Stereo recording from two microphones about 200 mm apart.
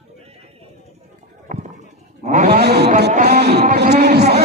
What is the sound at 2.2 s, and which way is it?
Speech, 35° right (ahead or behind).